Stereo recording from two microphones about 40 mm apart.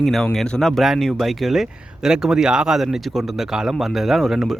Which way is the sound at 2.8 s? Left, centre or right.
Centre.